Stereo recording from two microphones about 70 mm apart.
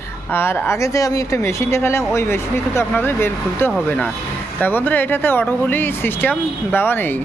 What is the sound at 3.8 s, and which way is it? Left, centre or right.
Speech, centre.